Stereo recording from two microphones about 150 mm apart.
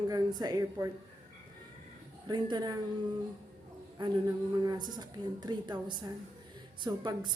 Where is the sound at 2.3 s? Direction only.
30° right (ahead or behind).